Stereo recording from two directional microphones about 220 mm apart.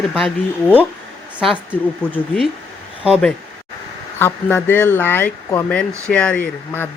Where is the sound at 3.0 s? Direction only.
5° right (ahead or behind).